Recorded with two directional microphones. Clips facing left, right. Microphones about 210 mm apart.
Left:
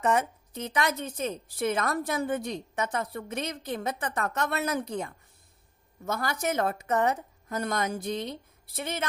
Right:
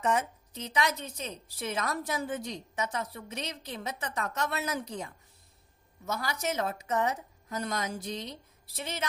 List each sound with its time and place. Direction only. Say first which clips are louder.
0.0 s a woman's voice: left 3 dB; 55° left (ahead or behind)